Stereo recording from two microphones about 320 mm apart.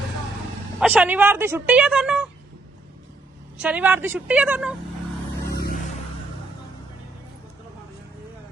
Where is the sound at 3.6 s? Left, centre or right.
Centre.